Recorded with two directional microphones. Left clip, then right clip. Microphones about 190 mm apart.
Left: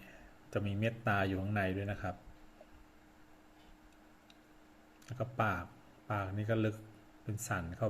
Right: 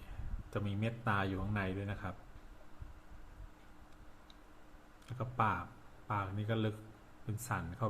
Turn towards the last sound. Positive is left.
turn(degrees=20)  # may be behind; listen again after turning